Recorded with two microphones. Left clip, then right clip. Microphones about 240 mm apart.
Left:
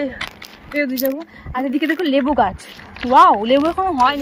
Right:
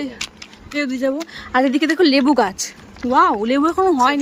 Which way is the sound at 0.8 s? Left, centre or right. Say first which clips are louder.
Even; centre.